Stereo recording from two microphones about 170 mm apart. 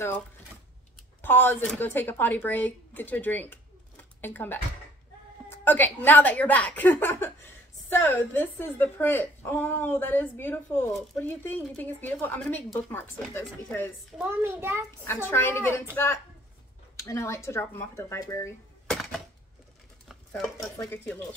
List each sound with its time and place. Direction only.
1.2 s speech: 10° left (ahead or behind)
14.1 s a child's voice: 10° right (ahead or behind)
15.0 s speech: 15° left (ahead or behind)
17.0 s speech: 20° left (ahead or behind)
18.9 s a sound: centre (ahead or behind)
20.1 s stir: centre (ahead or behind)
20.5 s speech: 15° left (ahead or behind)